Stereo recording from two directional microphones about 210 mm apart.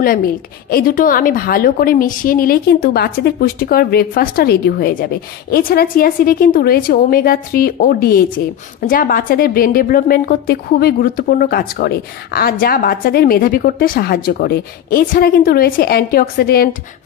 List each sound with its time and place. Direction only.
0.7 s a woman's voice: 45° left (ahead or behind)